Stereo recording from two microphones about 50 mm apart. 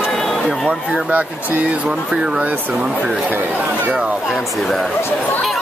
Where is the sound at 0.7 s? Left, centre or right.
Centre.